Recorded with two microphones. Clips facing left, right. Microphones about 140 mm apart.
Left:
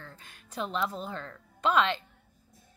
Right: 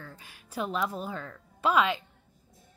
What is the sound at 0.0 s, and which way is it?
A woman's voice, 5° right (ahead or behind).